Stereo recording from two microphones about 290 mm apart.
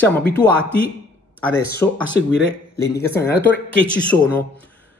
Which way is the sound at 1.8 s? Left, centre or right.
Centre.